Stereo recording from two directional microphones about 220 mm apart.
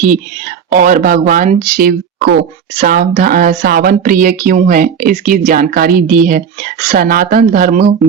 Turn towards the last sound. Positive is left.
turn(degrees=-40)  # may be behind; listen again after turning